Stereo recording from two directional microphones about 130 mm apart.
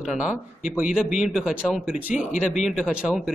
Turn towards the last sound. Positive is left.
turn(degrees=-5)  # may be behind; listen again after turning